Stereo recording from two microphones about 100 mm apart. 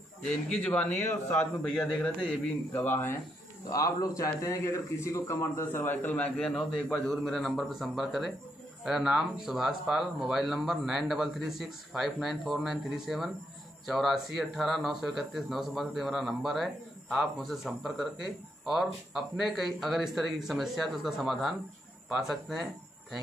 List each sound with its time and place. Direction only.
0.2 s a man's voice: 10° left (ahead or behind)
2.7 s speech: 20° left (ahead or behind)
3.7 s a man's voice: 35° left (ahead or behind); by 22.6 s centre (ahead or behind)